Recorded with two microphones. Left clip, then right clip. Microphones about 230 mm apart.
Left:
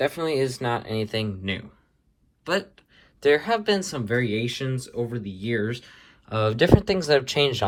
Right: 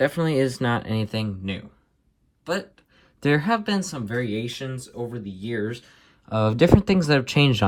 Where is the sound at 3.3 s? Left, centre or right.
Left.